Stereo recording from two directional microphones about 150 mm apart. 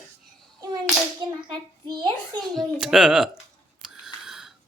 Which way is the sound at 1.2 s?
30° right (ahead or behind).